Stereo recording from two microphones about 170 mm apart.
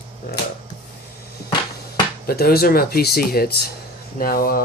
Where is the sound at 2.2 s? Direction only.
65° left (ahead or behind).